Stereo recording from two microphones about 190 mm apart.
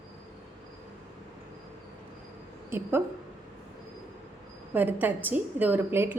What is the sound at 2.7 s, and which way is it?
Speech, 15° right (ahead or behind).